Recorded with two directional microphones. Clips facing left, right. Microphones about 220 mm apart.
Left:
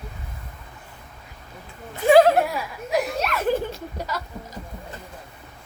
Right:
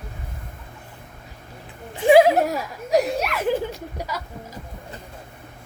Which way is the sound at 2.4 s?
40° right (ahead or behind).